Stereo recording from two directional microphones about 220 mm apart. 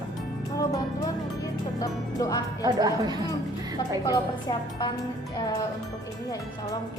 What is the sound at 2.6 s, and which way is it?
Speech, 15° right (ahead or behind).